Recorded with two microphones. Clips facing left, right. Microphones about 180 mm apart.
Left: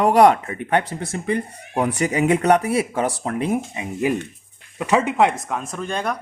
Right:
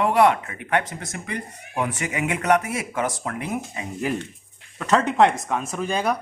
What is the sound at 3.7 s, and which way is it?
Speech, 15° left (ahead or behind).